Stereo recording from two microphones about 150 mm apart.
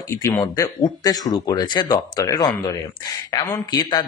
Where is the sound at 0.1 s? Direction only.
20° left (ahead or behind).